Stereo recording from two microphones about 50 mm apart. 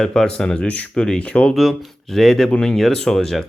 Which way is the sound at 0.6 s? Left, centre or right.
Left.